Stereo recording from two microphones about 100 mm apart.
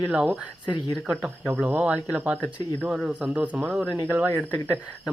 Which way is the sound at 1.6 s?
15° right (ahead or behind).